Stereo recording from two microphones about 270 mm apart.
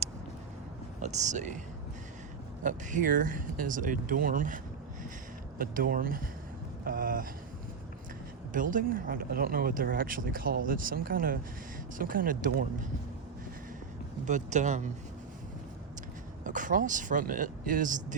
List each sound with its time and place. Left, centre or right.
1.0 s speech: right
2.6 s speech: right
8.5 s speech: right
14.3 s speech: right
16.4 s speech: right